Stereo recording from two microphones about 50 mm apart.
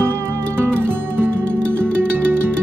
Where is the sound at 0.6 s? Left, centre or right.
Right.